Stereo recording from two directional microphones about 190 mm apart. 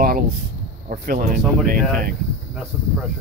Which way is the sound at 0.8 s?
50° right (ahead or behind).